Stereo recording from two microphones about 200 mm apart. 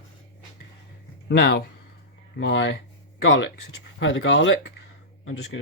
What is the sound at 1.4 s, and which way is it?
Speech, 55° left (ahead or behind).